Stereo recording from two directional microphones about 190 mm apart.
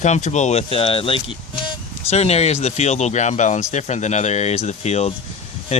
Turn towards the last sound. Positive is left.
turn(degrees=30)  # may be behind; listen again after turning